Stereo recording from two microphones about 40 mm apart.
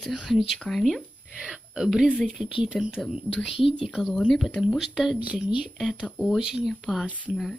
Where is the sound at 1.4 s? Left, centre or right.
Centre.